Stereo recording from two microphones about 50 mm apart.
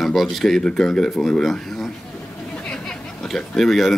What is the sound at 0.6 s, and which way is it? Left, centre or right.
Speech, centre.